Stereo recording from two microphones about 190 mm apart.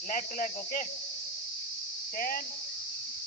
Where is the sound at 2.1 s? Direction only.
45° left (ahead or behind).